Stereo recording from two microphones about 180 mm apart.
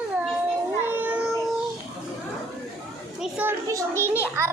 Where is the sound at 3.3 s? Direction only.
15° right (ahead or behind).